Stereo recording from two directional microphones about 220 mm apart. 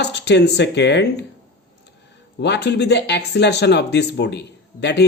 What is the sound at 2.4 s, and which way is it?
Speech, 50° left (ahead or behind).